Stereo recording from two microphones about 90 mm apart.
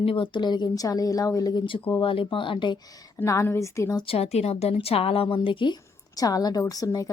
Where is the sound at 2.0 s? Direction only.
70° left (ahead or behind).